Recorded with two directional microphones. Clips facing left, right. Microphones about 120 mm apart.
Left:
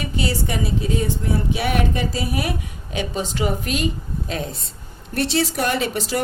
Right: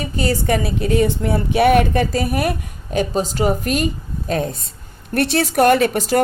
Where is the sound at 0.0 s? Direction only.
45° right (ahead or behind).